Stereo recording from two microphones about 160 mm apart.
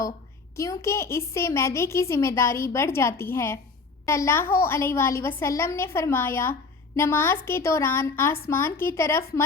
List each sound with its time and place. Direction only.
0.5 s a woman's voice: 20° left (ahead or behind)